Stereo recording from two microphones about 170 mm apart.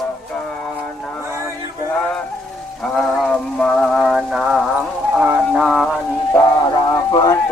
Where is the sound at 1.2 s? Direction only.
15° right (ahead or behind).